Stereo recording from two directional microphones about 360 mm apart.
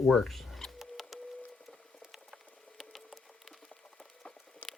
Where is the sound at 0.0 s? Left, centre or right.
Centre.